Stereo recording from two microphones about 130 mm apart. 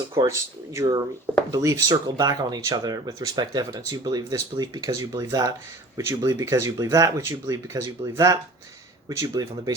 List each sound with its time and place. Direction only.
0.7 s speech: 25° right (ahead or behind)